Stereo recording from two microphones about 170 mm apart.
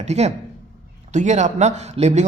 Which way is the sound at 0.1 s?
40° right (ahead or behind).